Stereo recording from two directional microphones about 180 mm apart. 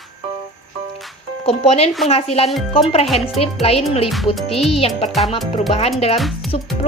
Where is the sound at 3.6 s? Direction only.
35° left (ahead or behind).